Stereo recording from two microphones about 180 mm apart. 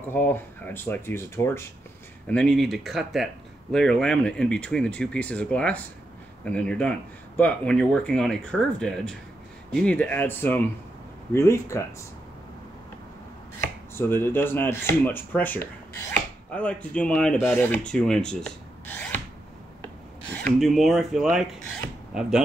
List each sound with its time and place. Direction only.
0.1 s speech: 10° left (ahead or behind)
13.9 s speech: 15° left (ahead or behind)
20.4 s speech: centre (ahead or behind)